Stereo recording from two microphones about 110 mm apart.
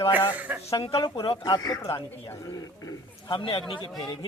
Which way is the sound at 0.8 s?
50° left (ahead or behind).